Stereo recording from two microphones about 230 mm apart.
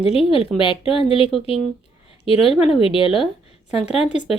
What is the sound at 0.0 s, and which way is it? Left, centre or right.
Speech, left.